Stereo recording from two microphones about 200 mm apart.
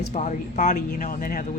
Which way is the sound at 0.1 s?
35° left (ahead or behind).